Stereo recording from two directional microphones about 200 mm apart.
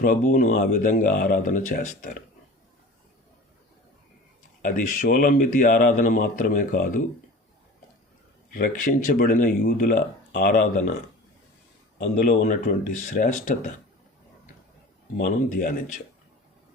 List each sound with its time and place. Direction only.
0.0 s a man's voice: 40° left (ahead or behind)
4.6 s a man's voice: 40° left (ahead or behind)
8.5 s a man's voice: 40° left (ahead or behind)
11.9 s a man's voice: 40° left (ahead or behind)
15.2 s a man's voice: 40° left (ahead or behind)